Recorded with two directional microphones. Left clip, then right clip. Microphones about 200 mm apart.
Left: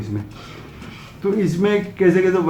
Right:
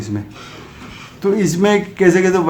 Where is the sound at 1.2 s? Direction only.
50° right (ahead or behind).